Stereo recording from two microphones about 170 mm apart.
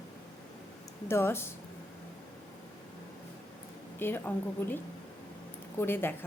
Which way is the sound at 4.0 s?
15° left (ahead or behind).